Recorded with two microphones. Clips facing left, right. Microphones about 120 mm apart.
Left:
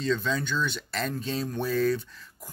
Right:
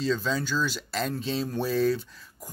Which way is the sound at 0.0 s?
5° right (ahead or behind).